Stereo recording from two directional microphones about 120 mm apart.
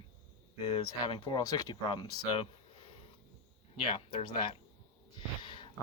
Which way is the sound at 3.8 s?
60° left (ahead or behind).